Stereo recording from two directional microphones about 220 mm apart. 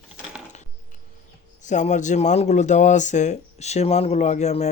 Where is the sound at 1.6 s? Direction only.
35° left (ahead or behind).